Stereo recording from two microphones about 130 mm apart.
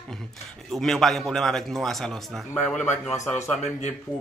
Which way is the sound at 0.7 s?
Centre (ahead or behind).